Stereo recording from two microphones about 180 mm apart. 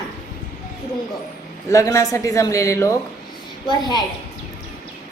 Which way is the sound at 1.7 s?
15° left (ahead or behind).